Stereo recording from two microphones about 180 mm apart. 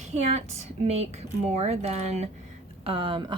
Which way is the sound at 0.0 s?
40° right (ahead or behind).